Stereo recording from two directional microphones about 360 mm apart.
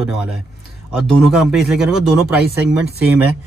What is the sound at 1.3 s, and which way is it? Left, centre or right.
Speech, centre.